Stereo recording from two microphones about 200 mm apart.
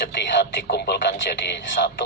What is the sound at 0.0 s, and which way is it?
Speech, 55° left (ahead or behind).